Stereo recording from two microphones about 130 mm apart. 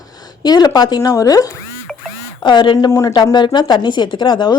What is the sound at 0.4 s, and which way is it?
A woman's voice, 30° left (ahead or behind).